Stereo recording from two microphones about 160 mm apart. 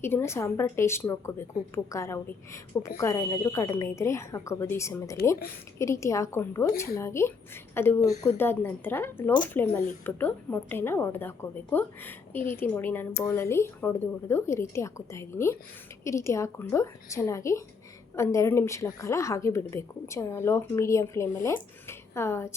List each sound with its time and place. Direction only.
0.0 s a woman's voice: 15° left (ahead or behind)